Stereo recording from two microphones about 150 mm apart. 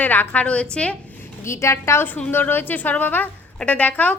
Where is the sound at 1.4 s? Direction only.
20° left (ahead or behind).